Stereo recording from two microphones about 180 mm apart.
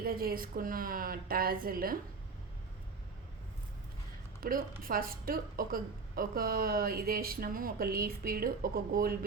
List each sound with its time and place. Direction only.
0.0 s a woman's voice: 55° right (ahead or behind)
4.4 s speech: 55° right (ahead or behind)